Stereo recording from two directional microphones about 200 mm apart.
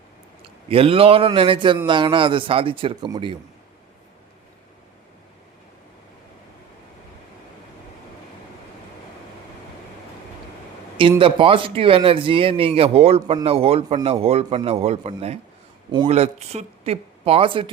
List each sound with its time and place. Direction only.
0.4 s a man's voice: 30° right (ahead or behind)
11.2 s speech: 25° right (ahead or behind)